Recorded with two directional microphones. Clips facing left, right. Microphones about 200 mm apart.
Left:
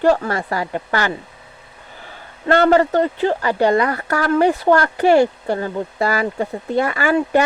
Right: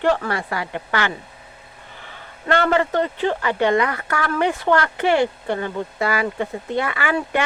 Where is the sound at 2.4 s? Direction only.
40° left (ahead or behind).